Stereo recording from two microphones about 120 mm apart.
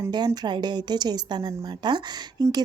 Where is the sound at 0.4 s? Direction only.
40° right (ahead or behind).